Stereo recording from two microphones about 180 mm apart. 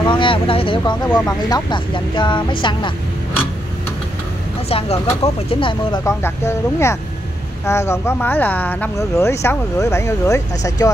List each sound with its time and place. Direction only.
0.0 s speech: 25° left (ahead or behind)
4.6 s speech: 35° left (ahead or behind)
6.0 s speech: 15° left (ahead or behind)